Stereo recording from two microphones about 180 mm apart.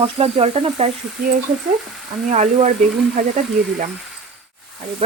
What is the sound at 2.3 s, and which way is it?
Speech, 40° right (ahead or behind).